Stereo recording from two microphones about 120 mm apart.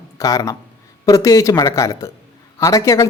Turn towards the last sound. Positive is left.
turn(degrees=30)  # may be behind; listen again after turning